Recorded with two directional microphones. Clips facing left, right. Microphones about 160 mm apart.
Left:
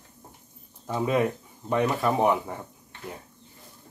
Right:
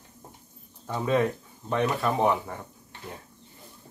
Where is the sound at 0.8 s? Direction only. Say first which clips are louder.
Even; 15° left (ahead or behind).